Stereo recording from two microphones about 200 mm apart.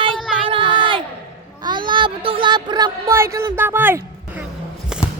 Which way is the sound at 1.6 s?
25° right (ahead or behind).